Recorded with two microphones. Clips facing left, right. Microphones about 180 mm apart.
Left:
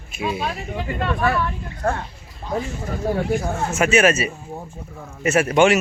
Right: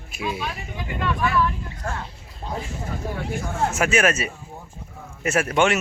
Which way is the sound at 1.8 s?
60° left (ahead or behind).